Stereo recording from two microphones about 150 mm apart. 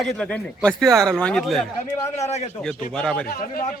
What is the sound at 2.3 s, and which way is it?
Speech, 45° left (ahead or behind).